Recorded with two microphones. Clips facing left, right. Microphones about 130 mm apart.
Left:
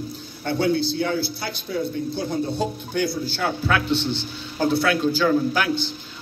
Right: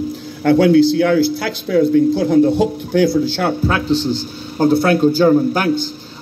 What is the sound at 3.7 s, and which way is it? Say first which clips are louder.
A man's voice: right 5 dB; 35° right (ahead or behind).